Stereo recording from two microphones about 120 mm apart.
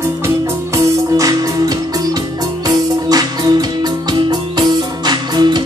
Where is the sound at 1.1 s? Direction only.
30° right (ahead or behind).